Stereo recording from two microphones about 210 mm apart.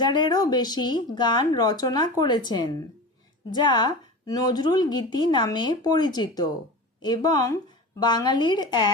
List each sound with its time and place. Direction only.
0.0 s a woman's voice: 20° left (ahead or behind)